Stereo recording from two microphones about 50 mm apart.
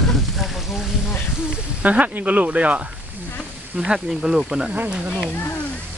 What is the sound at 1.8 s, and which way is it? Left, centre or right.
Speech, right.